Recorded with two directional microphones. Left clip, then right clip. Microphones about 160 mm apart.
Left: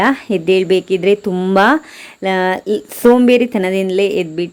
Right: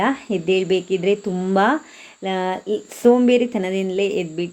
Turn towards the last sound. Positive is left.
turn(degrees=25)  # may be behind; listen again after turning